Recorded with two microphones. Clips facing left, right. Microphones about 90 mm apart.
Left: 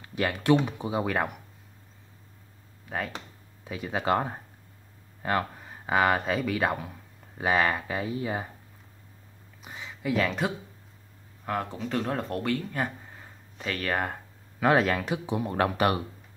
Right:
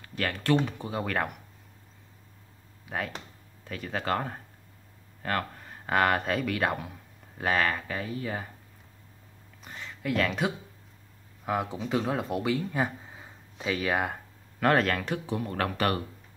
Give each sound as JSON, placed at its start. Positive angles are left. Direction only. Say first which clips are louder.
{"t": 0.0, "sound": "speech", "louder": "left 3 dB", "side_deg": 15}
{"t": 2.8, "sound": "a sound", "louder": "left 1 dB", "side_deg": 0}
{"t": 3.6, "sound": "speech", "louder": "left 3 dB", "side_deg": 10}
{"t": 9.6, "sound": "a man's voice", "louder": "left 1 dB", "side_deg": 5}
{"t": 14.6, "sound": "speech", "louder": "left 1 dB", "side_deg": 5}
{"t": 15.2, "sound": "speech", "louder": "left 3 dB", "side_deg": 15}